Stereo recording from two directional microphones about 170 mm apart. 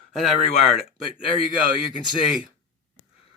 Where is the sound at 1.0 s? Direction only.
30° left (ahead or behind).